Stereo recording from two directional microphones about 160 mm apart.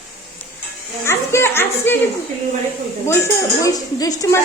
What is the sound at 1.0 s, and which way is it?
Speech, 15° left (ahead or behind).